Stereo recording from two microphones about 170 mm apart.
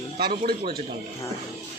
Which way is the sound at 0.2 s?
65° right (ahead or behind).